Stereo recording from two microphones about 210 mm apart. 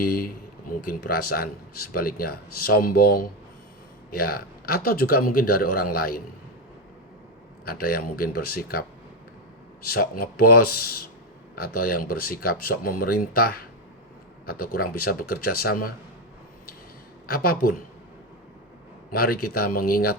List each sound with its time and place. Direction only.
0.0 s a man's voice: 45° left (ahead or behind)
7.6 s a man's voice: 45° left (ahead or behind)
9.9 s a man's voice: 45° left (ahead or behind)
17.2 s a man's voice: 45° left (ahead or behind)
19.1 s a man's voice: 45° left (ahead or behind)